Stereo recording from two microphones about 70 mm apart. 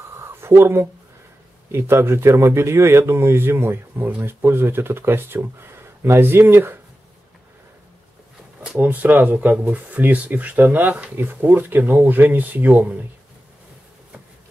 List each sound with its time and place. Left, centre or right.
0.2 s a sound: right
1.7 s a man's voice: right
8.7 s speech: right